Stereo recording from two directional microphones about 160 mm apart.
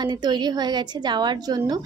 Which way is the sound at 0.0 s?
25° right (ahead or behind).